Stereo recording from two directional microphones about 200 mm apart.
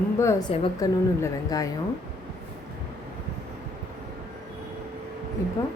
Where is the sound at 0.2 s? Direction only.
15° left (ahead or behind).